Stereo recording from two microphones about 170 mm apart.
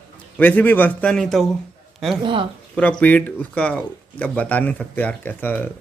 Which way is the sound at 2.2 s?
30° right (ahead or behind).